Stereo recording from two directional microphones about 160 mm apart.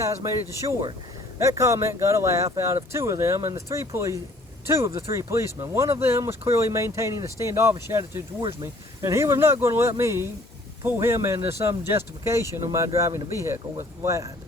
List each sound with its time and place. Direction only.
0.0 s speech: 20° right (ahead or behind)